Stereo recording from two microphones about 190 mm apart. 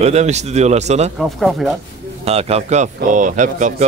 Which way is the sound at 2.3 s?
35° right (ahead or behind).